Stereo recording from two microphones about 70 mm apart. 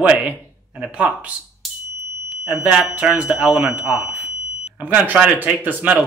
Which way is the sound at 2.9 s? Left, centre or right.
Centre.